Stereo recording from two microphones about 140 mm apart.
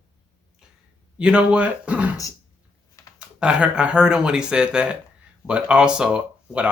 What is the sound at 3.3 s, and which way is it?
Speech, 5° right (ahead or behind).